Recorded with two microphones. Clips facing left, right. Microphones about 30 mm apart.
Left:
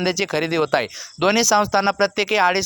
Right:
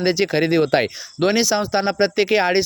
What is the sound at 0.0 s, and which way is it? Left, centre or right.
Speech, right.